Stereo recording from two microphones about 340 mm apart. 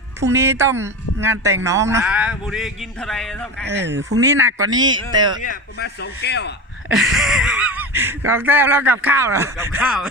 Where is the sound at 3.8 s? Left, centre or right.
Right.